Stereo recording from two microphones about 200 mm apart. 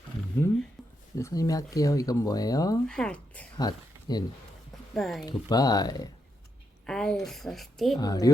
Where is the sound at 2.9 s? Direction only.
5° left (ahead or behind).